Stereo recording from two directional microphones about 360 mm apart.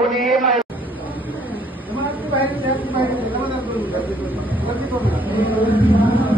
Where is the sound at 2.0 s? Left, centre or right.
Centre.